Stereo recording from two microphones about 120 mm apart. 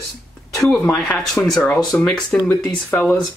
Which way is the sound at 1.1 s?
Centre (ahead or behind).